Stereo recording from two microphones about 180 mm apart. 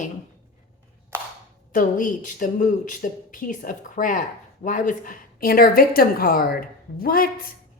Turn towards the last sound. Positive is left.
turn(degrees=55)  # may be behind; listen again after turning